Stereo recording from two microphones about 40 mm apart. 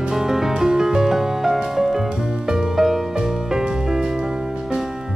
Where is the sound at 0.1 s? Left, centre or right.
Centre.